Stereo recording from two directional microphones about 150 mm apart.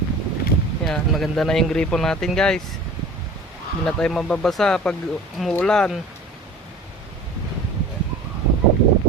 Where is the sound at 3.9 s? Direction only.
5° left (ahead or behind).